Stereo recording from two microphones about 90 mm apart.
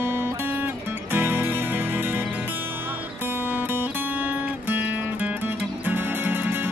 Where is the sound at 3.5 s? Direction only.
20° right (ahead or behind).